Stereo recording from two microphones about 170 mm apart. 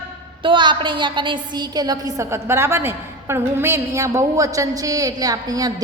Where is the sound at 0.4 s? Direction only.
30° right (ahead or behind).